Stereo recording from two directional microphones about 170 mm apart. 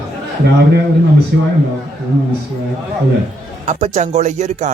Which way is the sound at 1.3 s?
90° right.